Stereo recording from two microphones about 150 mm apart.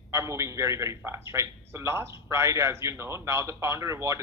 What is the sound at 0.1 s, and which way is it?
A man's voice, 20° right (ahead or behind).